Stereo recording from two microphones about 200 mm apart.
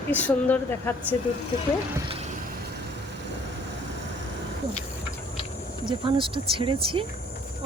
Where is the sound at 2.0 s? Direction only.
25° right (ahead or behind).